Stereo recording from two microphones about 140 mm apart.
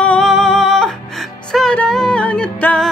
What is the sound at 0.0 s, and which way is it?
Music, 5° left (ahead or behind).